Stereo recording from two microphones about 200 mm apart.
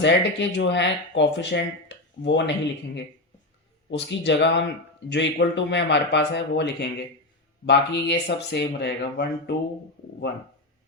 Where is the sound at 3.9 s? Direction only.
60° left (ahead or behind).